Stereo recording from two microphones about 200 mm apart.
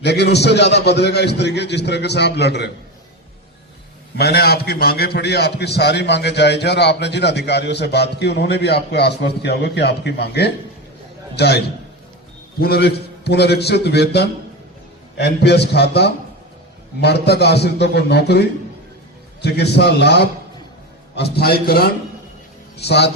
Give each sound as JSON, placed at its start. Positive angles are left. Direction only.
{"t": 0.0, "sound": "a man's voice", "side_deg": 55}
{"t": 4.2, "sound": "a man's voice", "side_deg": 50}